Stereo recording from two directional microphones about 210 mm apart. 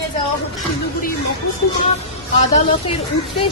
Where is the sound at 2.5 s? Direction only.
30° left (ahead or behind).